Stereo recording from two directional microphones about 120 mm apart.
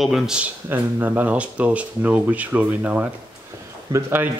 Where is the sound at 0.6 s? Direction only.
15° right (ahead or behind).